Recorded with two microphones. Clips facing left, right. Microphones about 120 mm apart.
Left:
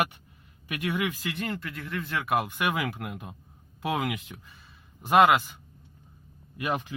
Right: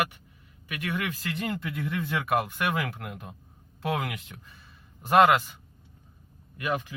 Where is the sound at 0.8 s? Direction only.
10° left (ahead or behind).